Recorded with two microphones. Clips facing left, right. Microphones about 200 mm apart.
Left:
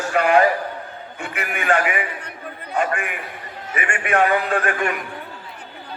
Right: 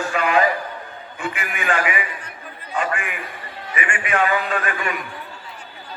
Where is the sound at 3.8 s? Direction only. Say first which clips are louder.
Even; 40° left (ahead or behind).